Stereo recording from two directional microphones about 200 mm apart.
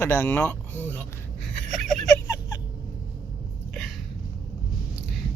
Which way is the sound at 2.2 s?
15° left (ahead or behind).